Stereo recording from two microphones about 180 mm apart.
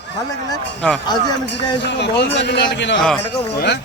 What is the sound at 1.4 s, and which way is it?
A man's voice, 75° left (ahead or behind).